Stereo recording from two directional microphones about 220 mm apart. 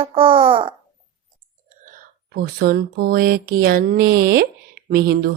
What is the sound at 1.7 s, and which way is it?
A woman's voice, 35° right (ahead or behind).